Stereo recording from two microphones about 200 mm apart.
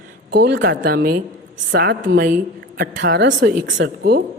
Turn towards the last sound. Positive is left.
turn(degrees=-55)  # may be behind; listen again after turning